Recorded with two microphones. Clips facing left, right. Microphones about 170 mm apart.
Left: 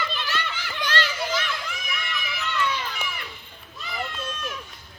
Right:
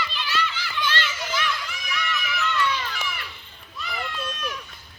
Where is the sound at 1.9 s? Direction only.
30° left (ahead or behind).